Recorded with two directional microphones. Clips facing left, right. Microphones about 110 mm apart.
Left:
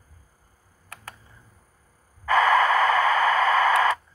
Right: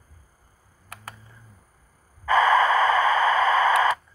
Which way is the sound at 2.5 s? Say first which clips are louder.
Even; 25° right (ahead or behind).